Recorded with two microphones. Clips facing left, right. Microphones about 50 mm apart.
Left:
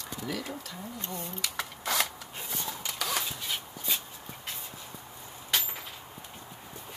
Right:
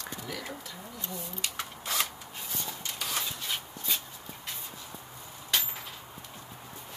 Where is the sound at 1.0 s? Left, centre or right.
Left.